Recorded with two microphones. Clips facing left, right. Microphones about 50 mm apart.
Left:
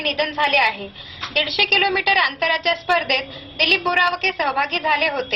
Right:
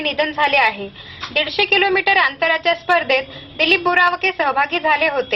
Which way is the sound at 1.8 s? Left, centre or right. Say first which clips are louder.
Right 3 dB; centre.